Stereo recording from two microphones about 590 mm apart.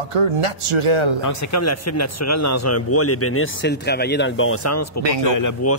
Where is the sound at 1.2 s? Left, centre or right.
Left.